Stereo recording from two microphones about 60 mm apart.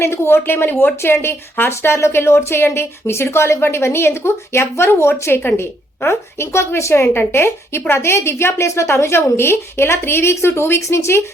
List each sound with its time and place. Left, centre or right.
0.0 s a woman's voice: left
7.1 s a woman's voice: left